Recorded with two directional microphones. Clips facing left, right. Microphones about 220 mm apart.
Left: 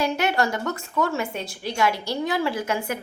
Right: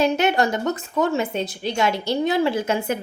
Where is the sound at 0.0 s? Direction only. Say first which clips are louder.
Right 4 dB; 20° right (ahead or behind).